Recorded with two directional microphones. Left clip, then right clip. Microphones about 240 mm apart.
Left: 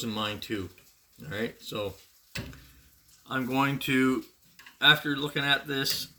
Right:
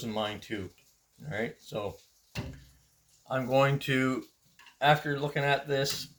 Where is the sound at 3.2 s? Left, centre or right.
Centre.